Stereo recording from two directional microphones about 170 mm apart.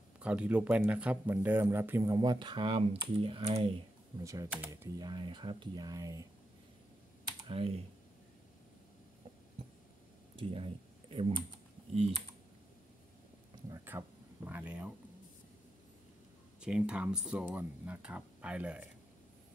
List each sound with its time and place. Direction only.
0.2 s speech: 5° right (ahead or behind); by 3.8 s 35° right (ahead or behind)
4.2 s speech: 20° right (ahead or behind)
7.2 s computer keyboard: 30° right (ahead or behind)
10.3 s speech: 30° right (ahead or behind)
13.7 s speech: 15° right (ahead or behind)
16.6 s speech: 5° right (ahead or behind)